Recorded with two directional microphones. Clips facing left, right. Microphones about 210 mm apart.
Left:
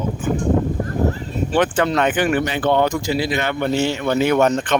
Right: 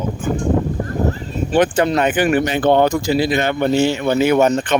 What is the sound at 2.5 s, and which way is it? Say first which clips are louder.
Speech: right 4 dB; 45° right (ahead or behind).